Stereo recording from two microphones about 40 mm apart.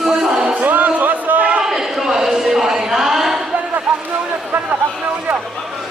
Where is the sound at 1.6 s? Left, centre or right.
Centre.